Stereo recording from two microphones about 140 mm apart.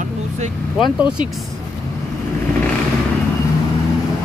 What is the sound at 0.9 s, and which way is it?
Speech, 10° right (ahead or behind).